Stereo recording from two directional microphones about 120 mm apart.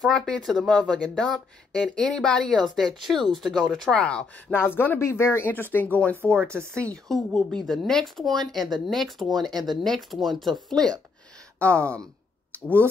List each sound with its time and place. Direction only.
0.0 s speech: 5° left (ahead or behind)
6.4 s speech: 20° right (ahead or behind)
6.7 s speech: 10° left (ahead or behind)
12.5 s speech: 15° left (ahead or behind)